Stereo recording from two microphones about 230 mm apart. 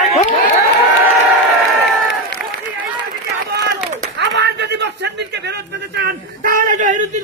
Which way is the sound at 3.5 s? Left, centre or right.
Right.